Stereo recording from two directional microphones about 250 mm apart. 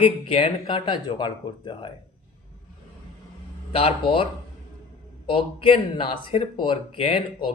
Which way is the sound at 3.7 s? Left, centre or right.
Left.